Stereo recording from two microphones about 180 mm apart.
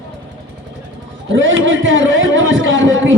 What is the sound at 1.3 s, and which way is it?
A man's voice, 90° right.